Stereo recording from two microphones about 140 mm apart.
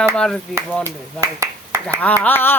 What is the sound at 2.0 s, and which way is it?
Speech, 10° left (ahead or behind).